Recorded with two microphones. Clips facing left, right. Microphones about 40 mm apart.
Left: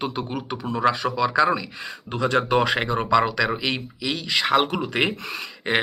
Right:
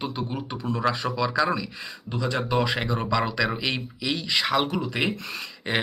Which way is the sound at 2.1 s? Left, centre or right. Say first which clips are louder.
Left 5 dB; left.